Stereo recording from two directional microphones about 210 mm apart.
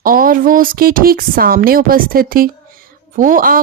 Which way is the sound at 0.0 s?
40° right (ahead or behind).